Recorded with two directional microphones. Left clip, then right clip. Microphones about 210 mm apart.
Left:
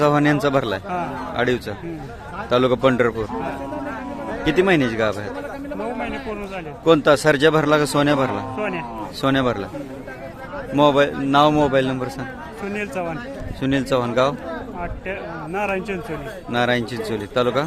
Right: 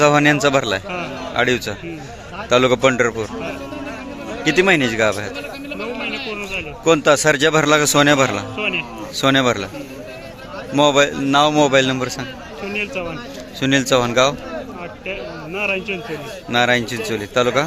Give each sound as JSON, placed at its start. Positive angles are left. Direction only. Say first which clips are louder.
{"t": 0.0, "sound": "a man's voice", "louder": "right 4 dB", "side_deg": 0}
{"t": 4.4, "sound": "a man's voice", "louder": "right 3 dB", "side_deg": 0}
{"t": 10.8, "sound": "a man's voice", "louder": "right 2 dB", "side_deg": 0}
{"t": 12.7, "sound": "speech", "louder": "right 5 dB", "side_deg": 40}
{"t": 13.6, "sound": "a man's voice", "louder": "right 5 dB", "side_deg": 0}